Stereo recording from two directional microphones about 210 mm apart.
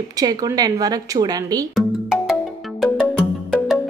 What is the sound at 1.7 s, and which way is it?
Music, centre (ahead or behind).